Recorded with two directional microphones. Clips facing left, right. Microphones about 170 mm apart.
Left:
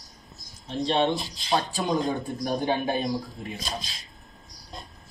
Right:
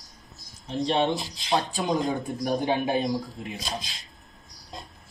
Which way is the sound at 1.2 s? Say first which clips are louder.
Even; 20° right (ahead or behind).